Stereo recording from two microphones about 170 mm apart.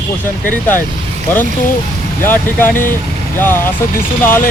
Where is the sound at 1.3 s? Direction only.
15° left (ahead or behind).